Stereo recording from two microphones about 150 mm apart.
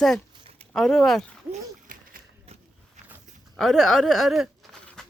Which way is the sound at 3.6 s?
Centre (ahead or behind).